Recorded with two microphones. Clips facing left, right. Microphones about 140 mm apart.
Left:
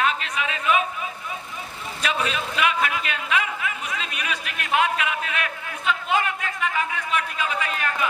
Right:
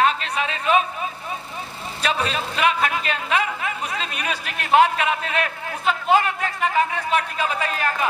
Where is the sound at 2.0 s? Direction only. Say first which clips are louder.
Right 2 dB; 35° right (ahead or behind).